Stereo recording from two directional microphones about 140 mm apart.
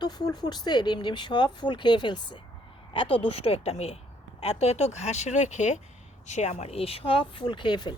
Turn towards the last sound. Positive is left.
turn(degrees=35)  # may be behind; listen again after turning